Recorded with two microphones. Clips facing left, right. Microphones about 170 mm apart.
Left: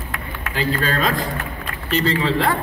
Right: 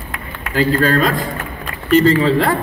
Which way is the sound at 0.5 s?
50° right (ahead or behind).